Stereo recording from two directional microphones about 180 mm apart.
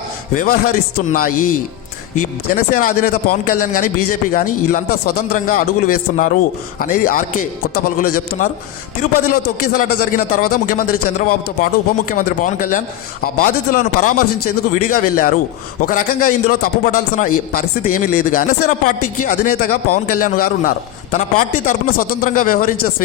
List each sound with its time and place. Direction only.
0.3 s a man's voice: 55° left (ahead or behind)
9.7 s a man's voice: 50° left (ahead or behind)